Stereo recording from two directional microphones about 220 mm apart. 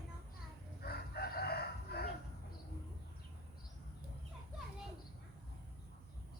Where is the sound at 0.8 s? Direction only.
45° left (ahead or behind).